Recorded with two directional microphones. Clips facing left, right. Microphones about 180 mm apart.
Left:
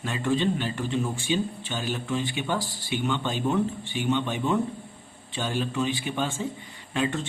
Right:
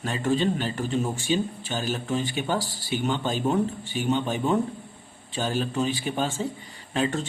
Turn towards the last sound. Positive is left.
turn(degrees=-40)  # may be behind; listen again after turning